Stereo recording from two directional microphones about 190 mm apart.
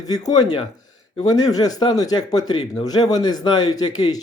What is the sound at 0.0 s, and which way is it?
A man's voice, 20° left (ahead or behind).